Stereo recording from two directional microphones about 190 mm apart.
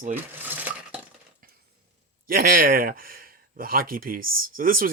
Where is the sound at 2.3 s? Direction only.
50° right (ahead or behind).